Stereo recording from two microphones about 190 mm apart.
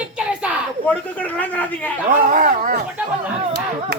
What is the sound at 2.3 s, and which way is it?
Speech, 45° right (ahead or behind).